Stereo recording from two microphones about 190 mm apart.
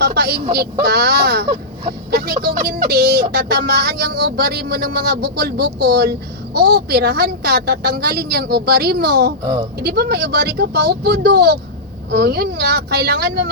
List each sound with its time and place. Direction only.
0.0 s speech: 55° right (ahead or behind)